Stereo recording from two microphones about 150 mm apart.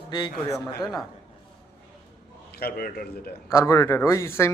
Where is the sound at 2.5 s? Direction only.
85° left.